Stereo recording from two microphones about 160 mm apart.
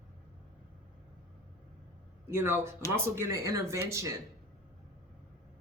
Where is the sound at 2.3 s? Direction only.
15° right (ahead or behind).